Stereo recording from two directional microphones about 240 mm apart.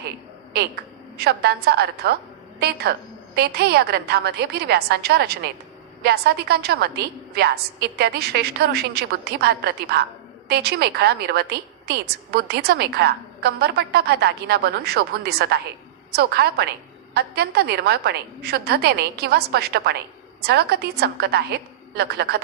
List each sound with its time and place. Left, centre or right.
1.2 s a woman's voice: right